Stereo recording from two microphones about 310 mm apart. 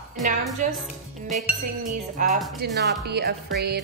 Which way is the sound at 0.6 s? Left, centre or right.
Right.